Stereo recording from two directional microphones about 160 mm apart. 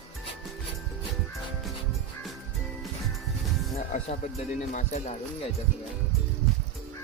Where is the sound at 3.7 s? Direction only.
45° left (ahead or behind).